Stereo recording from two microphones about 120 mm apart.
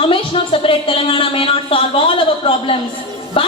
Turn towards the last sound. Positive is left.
turn(degrees=50)  # may be behind; listen again after turning